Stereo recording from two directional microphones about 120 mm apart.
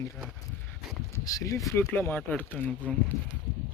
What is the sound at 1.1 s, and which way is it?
Speech, 30° left (ahead or behind).